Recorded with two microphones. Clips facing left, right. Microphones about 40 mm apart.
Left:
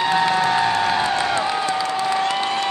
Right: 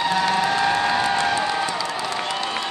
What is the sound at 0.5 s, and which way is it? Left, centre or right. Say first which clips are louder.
Music: left 1 dB; left.